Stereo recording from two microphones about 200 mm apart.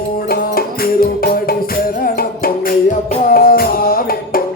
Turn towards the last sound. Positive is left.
turn(degrees=45)  # may be behind; listen again after turning